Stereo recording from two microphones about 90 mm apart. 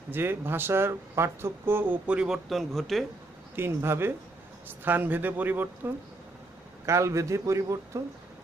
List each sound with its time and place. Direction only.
0.1 s speech: 25° right (ahead or behind)
2.0 s speech: 10° right (ahead or behind)
3.5 s speech: 25° right (ahead or behind)
6.9 s a man's voice: 35° right (ahead or behind)